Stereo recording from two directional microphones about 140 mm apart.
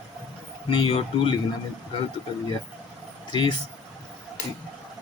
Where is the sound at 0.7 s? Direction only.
40° left (ahead or behind).